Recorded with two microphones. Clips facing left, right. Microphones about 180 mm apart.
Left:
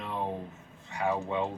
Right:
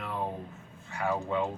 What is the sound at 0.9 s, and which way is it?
Speech, 20° left (ahead or behind).